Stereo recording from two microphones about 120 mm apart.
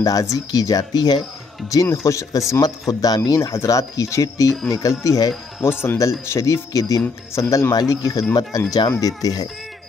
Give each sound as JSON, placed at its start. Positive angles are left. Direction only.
{"t": 0.0, "sound": "speech", "side_deg": 30}